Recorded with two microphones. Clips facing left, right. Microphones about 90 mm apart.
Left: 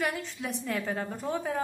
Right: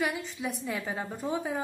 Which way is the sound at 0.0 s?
10° right (ahead or behind).